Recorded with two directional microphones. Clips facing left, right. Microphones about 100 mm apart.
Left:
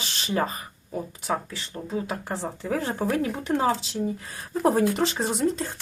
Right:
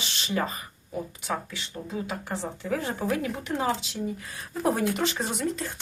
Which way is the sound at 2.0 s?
40° left (ahead or behind).